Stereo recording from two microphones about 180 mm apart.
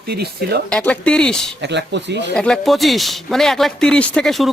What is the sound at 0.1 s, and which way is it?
Speech, 65° right (ahead or behind).